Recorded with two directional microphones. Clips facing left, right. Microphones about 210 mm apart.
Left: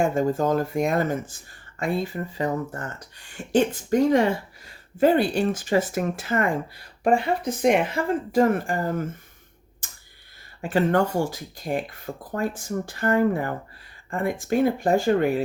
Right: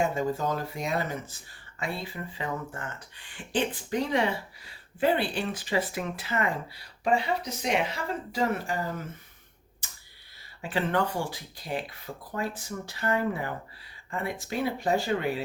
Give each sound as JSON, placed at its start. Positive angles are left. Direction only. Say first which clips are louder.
{"t": 0.0, "sound": "speech", "louder": "left 6 dB", "side_deg": 50}
{"t": 9.8, "sound": "a sound", "louder": "left 2 dB", "side_deg": 50}
{"t": 10.6, "sound": "speech", "louder": "left 7 dB", "side_deg": 45}